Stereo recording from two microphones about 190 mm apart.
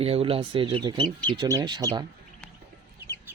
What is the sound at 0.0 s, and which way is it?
Speech, 30° right (ahead or behind).